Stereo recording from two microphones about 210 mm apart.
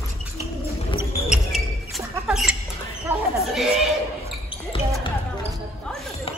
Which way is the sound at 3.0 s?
Centre (ahead or behind).